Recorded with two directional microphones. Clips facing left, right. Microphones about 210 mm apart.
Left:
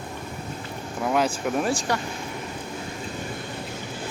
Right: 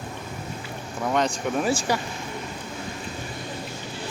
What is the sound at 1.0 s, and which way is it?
Speech, 5° left (ahead or behind).